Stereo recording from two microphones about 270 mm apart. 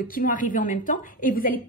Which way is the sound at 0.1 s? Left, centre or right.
Left.